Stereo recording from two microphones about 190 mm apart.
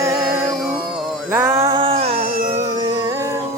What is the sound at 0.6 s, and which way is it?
Music, centre (ahead or behind).